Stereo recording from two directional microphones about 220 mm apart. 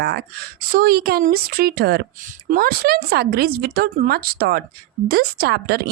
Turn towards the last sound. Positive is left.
turn(degrees=-45)  # may be behind; listen again after turning